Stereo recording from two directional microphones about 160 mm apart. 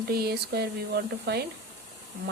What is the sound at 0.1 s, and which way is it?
Speech, 80° right.